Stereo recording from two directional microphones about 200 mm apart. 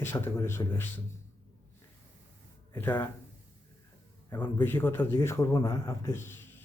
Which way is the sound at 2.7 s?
10° left (ahead or behind).